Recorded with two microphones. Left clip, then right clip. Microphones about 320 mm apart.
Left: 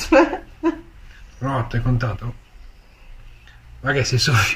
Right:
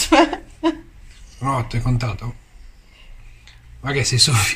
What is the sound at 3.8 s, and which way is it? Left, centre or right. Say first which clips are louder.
Speech: left 1 dB; centre.